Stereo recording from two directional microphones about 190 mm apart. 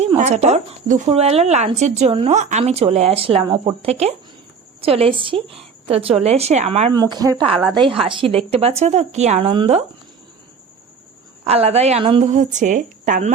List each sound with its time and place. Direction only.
0.2 s a woman's voice: 35° right (ahead or behind)
6.9 s speech: 20° right (ahead or behind)
7.5 s a woman's voice: centre (ahead or behind)
7.8 s speech: 25° right (ahead or behind)
11.4 s speech: 30° right (ahead or behind)